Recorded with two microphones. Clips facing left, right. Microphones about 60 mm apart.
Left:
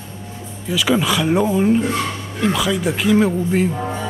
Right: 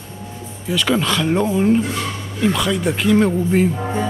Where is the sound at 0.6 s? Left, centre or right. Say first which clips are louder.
Left 1 dB; centre.